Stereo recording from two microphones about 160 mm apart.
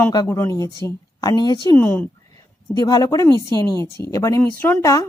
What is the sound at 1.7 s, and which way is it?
Speech, 10° left (ahead or behind).